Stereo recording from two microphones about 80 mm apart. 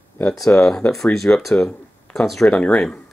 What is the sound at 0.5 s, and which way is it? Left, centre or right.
Speech, centre.